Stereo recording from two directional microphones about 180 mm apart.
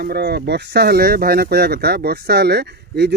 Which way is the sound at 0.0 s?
60° right (ahead or behind).